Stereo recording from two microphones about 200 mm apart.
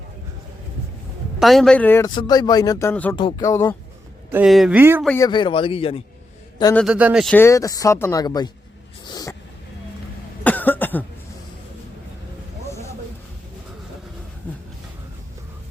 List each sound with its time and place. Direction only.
1.4 s a man's voice: centre (ahead or behind)
2.0 s speech: 20° left (ahead or behind)
3.2 s speech: 20° left (ahead or behind)
4.3 s speech: 5° right (ahead or behind)
5.0 s speech: 10° left (ahead or behind)
5.3 s speech: 25° left (ahead or behind)
6.7 s a man's voice: 5° right (ahead or behind)
7.3 s speech: 15° left (ahead or behind)
9.0 s a sound: 20° left (ahead or behind)
10.4 s cough: 10° left (ahead or behind)